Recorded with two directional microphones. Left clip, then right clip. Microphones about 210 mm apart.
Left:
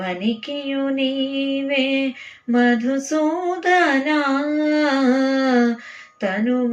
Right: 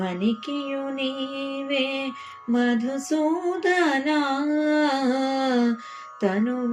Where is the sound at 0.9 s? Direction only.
30° right (ahead or behind).